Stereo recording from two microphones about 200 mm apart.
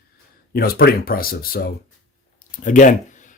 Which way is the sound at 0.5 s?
50° left (ahead or behind).